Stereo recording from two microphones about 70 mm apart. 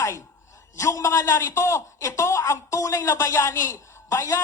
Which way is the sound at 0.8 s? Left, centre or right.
Left.